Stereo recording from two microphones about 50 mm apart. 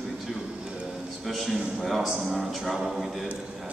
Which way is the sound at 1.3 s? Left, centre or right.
Centre.